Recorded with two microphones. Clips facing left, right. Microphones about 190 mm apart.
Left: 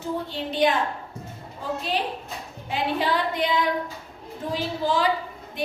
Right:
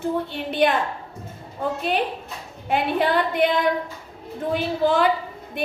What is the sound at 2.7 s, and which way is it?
A woman's voice, 55° right (ahead or behind).